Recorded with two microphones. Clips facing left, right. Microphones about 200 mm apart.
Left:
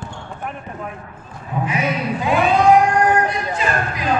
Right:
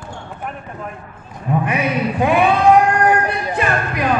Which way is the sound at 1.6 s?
60° right (ahead or behind).